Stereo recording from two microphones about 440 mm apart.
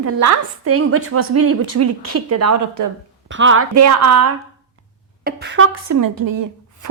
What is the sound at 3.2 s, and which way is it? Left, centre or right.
Speech, right.